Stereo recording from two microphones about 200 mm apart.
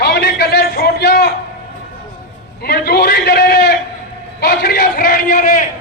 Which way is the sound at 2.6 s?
50° left (ahead or behind).